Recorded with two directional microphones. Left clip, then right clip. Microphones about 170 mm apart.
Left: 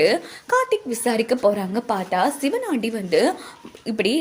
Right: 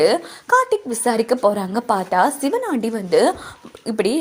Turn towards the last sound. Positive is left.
turn(degrees=-15)  # may be behind; listen again after turning